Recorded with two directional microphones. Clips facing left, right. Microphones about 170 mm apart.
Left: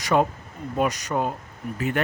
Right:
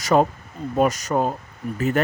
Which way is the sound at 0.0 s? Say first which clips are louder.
Right 3 dB; 40° right (ahead or behind).